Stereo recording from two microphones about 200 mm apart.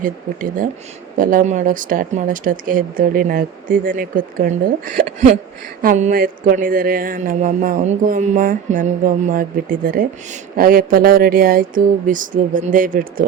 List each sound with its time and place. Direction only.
0.0 s speech: 40° right (ahead or behind)